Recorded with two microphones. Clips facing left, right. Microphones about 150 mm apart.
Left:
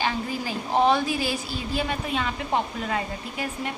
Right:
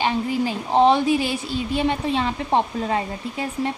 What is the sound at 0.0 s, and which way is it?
Speech, 20° right (ahead or behind).